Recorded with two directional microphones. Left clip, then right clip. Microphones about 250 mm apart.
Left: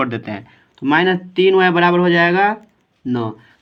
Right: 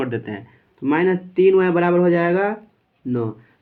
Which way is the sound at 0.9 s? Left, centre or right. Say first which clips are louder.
Left 4 dB; left.